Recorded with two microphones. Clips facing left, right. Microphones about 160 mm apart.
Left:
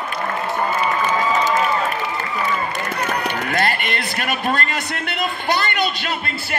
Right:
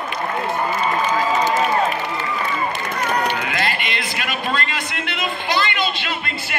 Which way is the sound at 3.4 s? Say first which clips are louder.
Left 2 dB; 50° left (ahead or behind).